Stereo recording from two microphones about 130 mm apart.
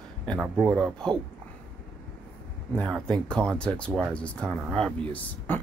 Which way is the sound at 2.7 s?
5° left (ahead or behind).